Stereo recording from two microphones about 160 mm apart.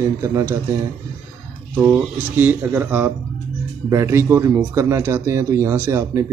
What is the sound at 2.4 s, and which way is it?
Speech, 10° right (ahead or behind).